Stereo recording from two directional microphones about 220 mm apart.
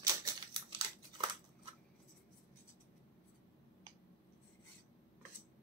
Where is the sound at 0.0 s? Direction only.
20° right (ahead or behind).